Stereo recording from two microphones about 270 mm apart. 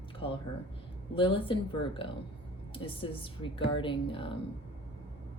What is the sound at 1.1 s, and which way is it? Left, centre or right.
A woman's voice, centre.